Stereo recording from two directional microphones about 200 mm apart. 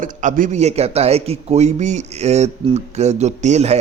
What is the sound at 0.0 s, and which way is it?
Speech, 40° right (ahead or behind).